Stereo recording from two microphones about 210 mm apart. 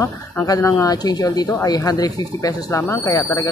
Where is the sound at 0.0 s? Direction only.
15° left (ahead or behind).